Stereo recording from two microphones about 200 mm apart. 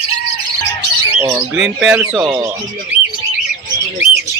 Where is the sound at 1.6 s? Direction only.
5° right (ahead or behind).